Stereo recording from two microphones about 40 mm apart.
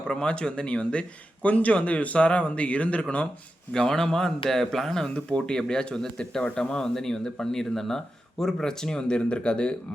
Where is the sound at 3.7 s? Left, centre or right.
Centre.